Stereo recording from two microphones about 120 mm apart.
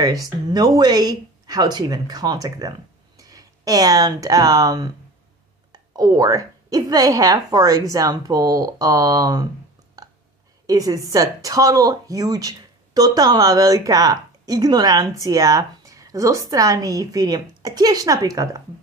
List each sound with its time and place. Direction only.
0.0 s speech: 30° right (ahead or behind)
10.0 s a sound: 30° right (ahead or behind)
10.7 s speech: 30° right (ahead or behind)